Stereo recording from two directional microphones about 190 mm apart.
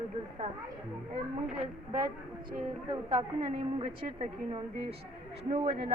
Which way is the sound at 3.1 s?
25° right (ahead or behind).